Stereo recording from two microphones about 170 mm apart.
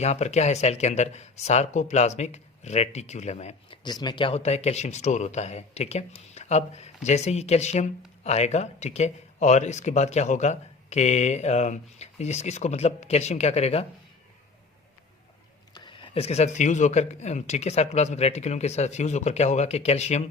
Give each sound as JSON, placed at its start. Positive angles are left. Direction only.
{"t": 0.0, "sound": "speech", "side_deg": 40}
{"t": 3.8, "sound": "speech", "side_deg": 25}
{"t": 15.7, "sound": "speech", "side_deg": 30}